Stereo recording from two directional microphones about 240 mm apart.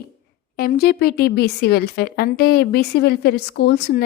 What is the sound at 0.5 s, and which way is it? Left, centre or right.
A woman's voice, left.